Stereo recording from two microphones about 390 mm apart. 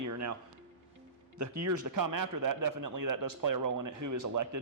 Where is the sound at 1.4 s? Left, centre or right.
Right.